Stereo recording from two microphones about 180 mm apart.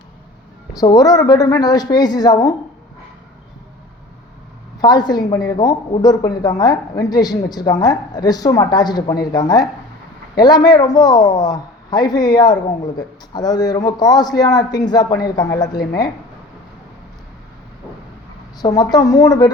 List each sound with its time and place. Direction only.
0.8 s speech: 20° left (ahead or behind)
4.8 s speech: 25° left (ahead or behind)
18.6 s speech: 20° left (ahead or behind)